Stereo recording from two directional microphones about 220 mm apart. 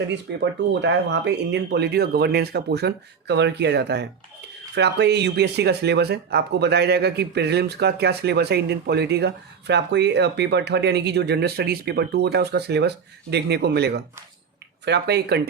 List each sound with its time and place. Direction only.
0.7 s speech: 50° right (ahead or behind)